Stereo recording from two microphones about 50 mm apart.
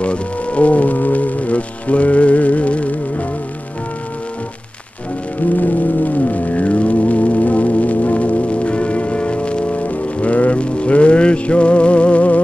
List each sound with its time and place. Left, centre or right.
0.0 s music: left
5.6 s music: left